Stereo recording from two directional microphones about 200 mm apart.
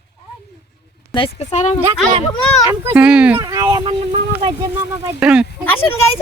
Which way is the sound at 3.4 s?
15° right (ahead or behind).